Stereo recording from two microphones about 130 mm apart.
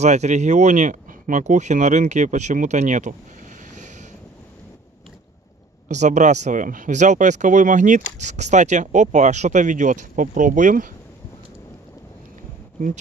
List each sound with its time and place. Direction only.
0.0 s speech: 60° right (ahead or behind)
3.7 s a sound: 70° right (ahead or behind)
5.9 s speech: 65° right (ahead or behind)
8.2 s speech: 65° right (ahead or behind); by 10.9 s 85° right